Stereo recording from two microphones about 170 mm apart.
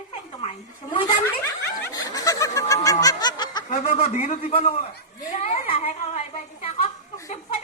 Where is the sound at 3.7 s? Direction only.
45° left (ahead or behind).